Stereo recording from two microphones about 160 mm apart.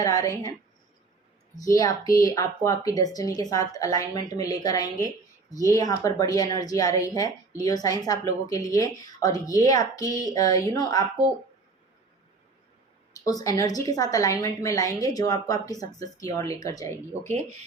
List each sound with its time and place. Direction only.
0.0 s speech: 20° left (ahead or behind)
1.6 s speech: 20° left (ahead or behind)
13.2 s speech: 20° left (ahead or behind)